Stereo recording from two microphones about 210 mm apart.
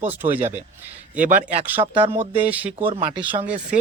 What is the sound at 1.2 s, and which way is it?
Speech, 40° right (ahead or behind).